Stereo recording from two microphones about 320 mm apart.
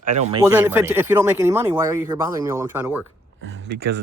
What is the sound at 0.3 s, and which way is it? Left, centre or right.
Speech, centre.